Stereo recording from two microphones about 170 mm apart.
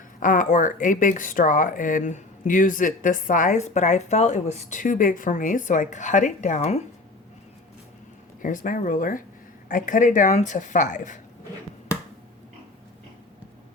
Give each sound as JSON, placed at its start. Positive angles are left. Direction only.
{"t": 0.2, "sound": "speech", "side_deg": 50}
{"t": 8.4, "sound": "speech", "side_deg": 50}